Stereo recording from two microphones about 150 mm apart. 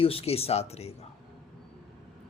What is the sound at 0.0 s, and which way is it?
Speech, 40° left (ahead or behind).